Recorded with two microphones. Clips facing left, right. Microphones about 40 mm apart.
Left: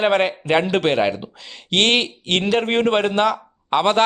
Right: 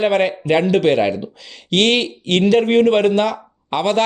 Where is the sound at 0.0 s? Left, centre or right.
Left.